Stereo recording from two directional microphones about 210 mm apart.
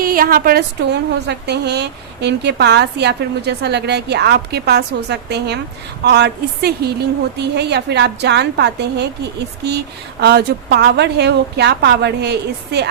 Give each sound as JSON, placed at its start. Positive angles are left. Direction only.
{"t": 0.0, "sound": "a woman's voice", "side_deg": -45}